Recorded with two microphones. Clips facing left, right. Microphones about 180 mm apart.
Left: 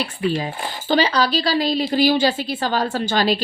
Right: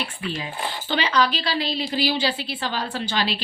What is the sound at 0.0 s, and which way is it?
A woman's voice, 35° left (ahead or behind).